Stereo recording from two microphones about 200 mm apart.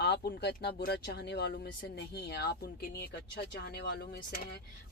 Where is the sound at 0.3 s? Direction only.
55° left (ahead or behind).